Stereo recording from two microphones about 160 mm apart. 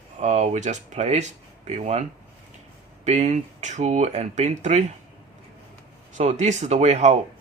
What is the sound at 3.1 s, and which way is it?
Speech, 45° right (ahead or behind).